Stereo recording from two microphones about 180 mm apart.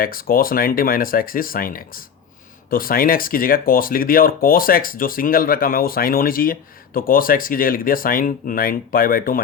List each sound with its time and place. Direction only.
0.0 s speech: 55° left (ahead or behind)